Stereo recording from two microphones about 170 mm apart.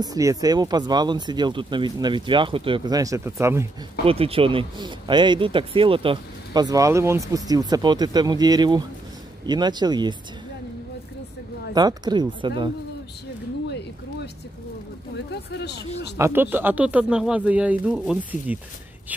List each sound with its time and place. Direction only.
0.0 s speech: 20° right (ahead or behind)
4.0 s speech: 35° right (ahead or behind)
11.7 s speech: 25° right (ahead or behind)
13.7 s a sound: 80° left
16.2 s speech: 15° right (ahead or behind)